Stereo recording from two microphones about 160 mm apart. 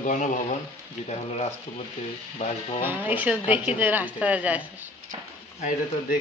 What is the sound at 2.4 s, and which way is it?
Speech, 40° left (ahead or behind).